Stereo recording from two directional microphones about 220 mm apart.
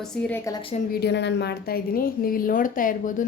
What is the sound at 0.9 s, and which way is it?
A woman's voice, 50° left (ahead or behind).